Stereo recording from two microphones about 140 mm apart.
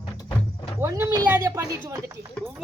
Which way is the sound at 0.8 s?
20° right (ahead or behind).